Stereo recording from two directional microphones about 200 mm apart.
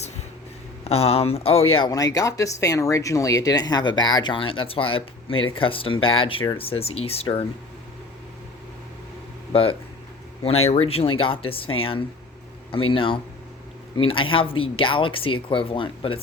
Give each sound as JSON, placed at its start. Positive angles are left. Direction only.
{"t": 0.9, "sound": "speech", "side_deg": 30}
{"t": 9.5, "sound": "speech", "side_deg": 30}